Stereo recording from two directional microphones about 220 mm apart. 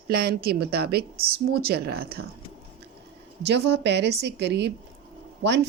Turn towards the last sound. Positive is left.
turn(degrees=-50)  # may be behind; listen again after turning